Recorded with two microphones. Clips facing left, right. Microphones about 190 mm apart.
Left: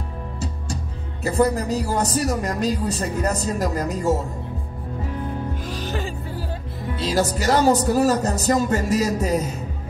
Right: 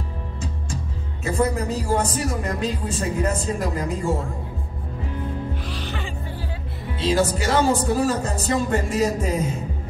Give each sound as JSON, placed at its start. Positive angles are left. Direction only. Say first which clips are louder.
{"t": 1.2, "sound": "a man's voice", "louder": "left 3 dB", "side_deg": 35}
{"t": 5.7, "sound": "music", "louder": "left 3 dB", "side_deg": 40}
{"t": 7.0, "sound": "a man's voice", "louder": "right 1 dB", "side_deg": 40}